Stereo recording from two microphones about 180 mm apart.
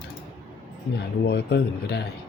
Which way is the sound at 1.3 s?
65° left (ahead or behind).